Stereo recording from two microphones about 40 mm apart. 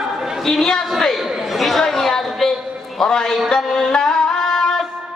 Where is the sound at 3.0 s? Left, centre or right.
Centre.